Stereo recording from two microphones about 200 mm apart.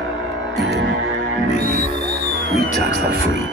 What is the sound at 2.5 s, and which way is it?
Music, 35° left (ahead or behind).